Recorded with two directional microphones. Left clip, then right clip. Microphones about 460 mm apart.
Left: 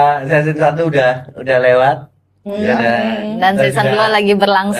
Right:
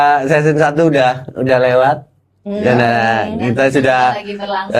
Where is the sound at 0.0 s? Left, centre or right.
Right.